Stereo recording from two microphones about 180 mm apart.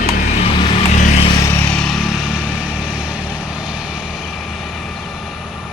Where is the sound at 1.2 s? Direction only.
20° left (ahead or behind).